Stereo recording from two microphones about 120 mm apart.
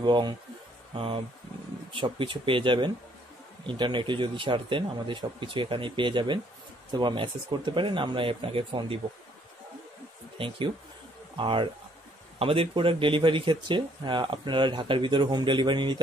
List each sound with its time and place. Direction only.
0.0 s a man's voice: 40° right (ahead or behind)
10.3 s speech: 45° right (ahead or behind)